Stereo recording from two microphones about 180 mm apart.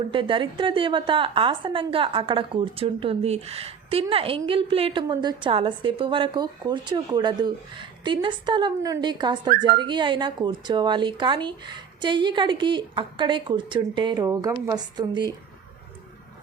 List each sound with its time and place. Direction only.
0.1 s a woman's voice: 30° right (ahead or behind)